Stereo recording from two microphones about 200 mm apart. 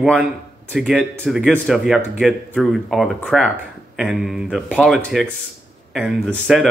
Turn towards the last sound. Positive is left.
turn(degrees=0)  # may be behind; listen again after turning